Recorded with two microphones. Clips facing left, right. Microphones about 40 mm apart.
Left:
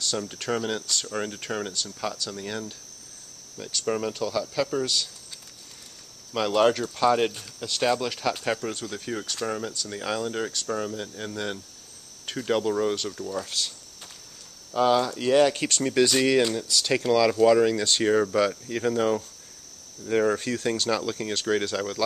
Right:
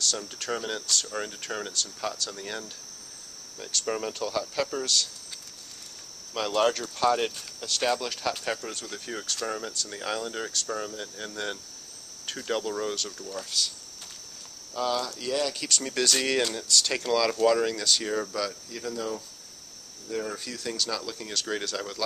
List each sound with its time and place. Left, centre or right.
0.1 s speech: centre
4.6 s speech: centre
6.3 s speech: centre
14.7 s speech: left
15.8 s speech: centre
17.8 s speech: left
21.5 s speech: centre